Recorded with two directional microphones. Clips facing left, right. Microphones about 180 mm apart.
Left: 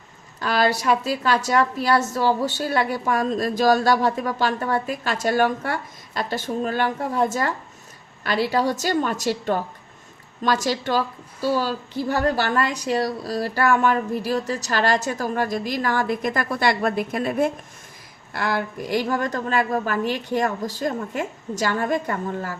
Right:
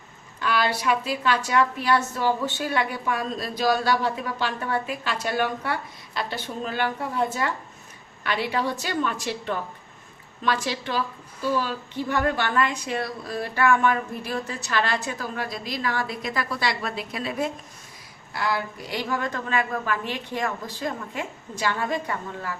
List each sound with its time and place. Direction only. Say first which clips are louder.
0.3 s a woman's voice: left 4 dB; 40° left (ahead or behind)